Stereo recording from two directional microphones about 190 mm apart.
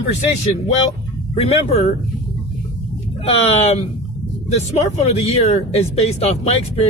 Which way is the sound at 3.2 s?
30° left (ahead or behind).